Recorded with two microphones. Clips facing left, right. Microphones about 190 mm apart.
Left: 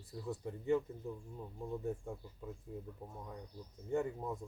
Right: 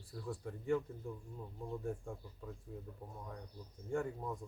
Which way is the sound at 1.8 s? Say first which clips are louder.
Left 2 dB; 20° left (ahead or behind).